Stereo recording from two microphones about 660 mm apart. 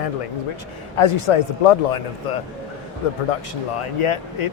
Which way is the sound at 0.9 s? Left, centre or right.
Left.